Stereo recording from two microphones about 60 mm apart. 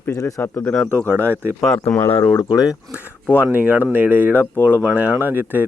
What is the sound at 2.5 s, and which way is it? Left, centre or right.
Speech, centre.